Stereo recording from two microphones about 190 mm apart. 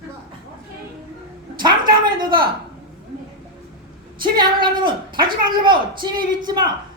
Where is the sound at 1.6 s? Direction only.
25° right (ahead or behind).